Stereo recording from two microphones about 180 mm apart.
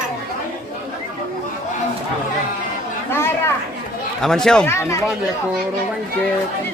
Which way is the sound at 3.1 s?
15° left (ahead or behind).